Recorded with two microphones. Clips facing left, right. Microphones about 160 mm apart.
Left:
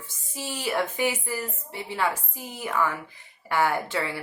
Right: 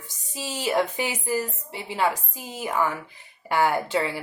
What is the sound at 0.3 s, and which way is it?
A woman's voice, 20° right (ahead or behind).